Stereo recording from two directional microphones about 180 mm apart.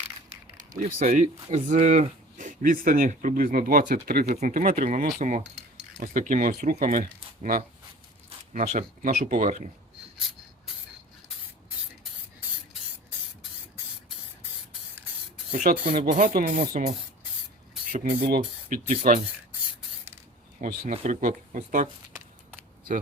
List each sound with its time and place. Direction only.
0.3 s speech: 45° right (ahead or behind)
16.0 s speech: 50° right (ahead or behind)
17.9 s speech: 50° right (ahead or behind)
20.6 s speech: 40° right (ahead or behind)